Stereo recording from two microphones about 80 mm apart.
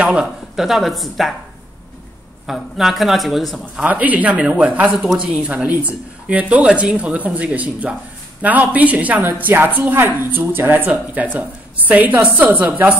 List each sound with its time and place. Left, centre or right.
0.0 s speech: centre
2.4 s speech: centre
3.8 s a woman's voice: centre
4.9 s a woman's voice: centre